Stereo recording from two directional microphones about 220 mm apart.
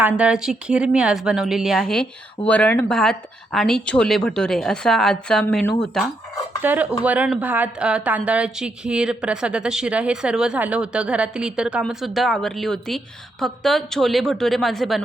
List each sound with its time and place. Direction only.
0.0 s speech: 5° right (ahead or behind)
6.6 s dishes: 10° right (ahead or behind)
7.0 s speech: 5° right (ahead or behind)